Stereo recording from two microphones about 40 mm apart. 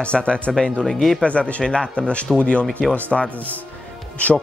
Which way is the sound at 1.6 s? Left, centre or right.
Left.